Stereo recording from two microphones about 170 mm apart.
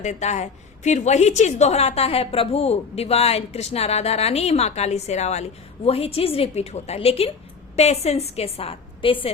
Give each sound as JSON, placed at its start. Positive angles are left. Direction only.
{"t": 0.0, "sound": "a woman's voice", "side_deg": 45}